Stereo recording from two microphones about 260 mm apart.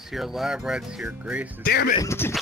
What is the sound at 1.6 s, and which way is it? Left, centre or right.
Speech, left.